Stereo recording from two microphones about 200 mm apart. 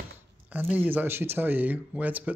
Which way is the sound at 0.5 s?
10° right (ahead or behind).